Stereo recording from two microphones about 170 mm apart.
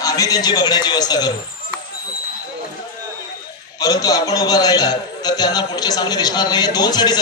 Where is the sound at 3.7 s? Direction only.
20° left (ahead or behind).